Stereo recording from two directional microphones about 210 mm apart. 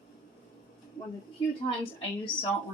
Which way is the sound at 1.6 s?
25° left (ahead or behind).